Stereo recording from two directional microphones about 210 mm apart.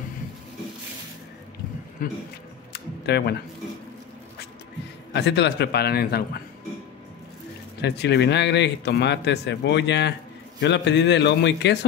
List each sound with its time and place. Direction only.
2.0 s speech: 40° left (ahead or behind)
2.7 s camera: 50° left (ahead or behind)
5.1 s a man's voice: 55° left (ahead or behind)
7.8 s speech: 55° left (ahead or behind)